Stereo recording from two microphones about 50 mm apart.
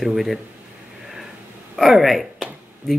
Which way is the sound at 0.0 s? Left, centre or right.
Centre.